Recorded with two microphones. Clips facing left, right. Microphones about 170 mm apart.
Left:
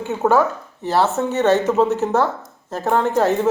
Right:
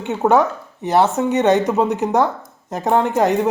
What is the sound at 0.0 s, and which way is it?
Speech, 20° right (ahead or behind).